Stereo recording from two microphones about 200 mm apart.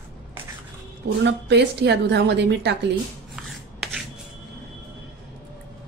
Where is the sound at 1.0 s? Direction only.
60° right (ahead or behind).